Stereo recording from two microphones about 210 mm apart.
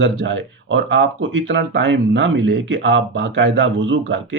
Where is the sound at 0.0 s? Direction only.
60° right (ahead or behind).